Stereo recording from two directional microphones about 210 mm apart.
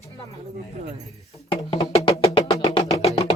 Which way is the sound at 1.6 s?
15° left (ahead or behind).